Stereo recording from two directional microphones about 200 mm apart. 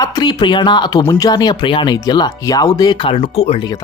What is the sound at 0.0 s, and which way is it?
Speech, 20° left (ahead or behind).